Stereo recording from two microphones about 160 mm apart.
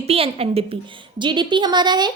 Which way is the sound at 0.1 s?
40° right (ahead or behind).